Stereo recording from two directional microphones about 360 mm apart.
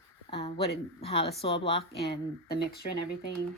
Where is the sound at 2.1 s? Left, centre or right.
Left.